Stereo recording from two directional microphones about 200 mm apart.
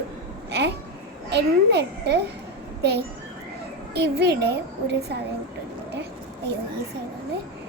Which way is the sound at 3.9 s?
55° right (ahead or behind).